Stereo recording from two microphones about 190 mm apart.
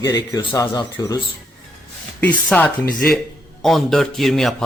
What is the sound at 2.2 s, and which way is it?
A man's voice, 10° left (ahead or behind).